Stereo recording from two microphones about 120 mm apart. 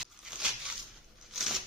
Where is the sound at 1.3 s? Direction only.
Centre (ahead or behind).